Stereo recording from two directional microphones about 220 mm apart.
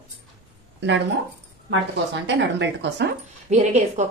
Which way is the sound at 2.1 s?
55° right (ahead or behind).